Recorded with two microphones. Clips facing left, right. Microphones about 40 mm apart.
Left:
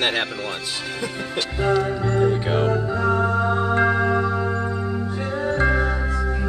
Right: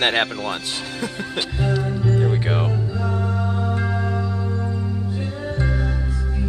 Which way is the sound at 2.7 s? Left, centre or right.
Left.